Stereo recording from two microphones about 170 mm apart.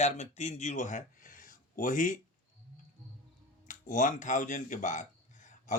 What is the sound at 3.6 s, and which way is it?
Speech, 50° left (ahead or behind).